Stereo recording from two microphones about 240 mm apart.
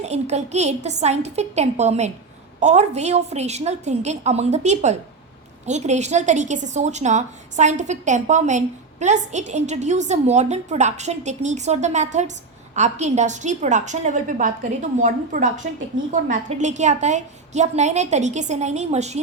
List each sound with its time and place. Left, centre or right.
0.0 s a woman's voice: right